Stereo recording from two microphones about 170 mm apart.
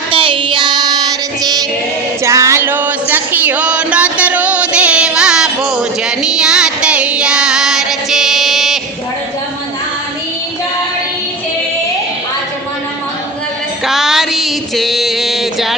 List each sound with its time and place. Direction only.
0.1 s child singing: 30° right (ahead or behind)
1.4 s music: 20° right (ahead or behind); by 5.5 s 5° right (ahead or behind)
6.1 s child singing: 5° right (ahead or behind)
13.8 s music: centre (ahead or behind)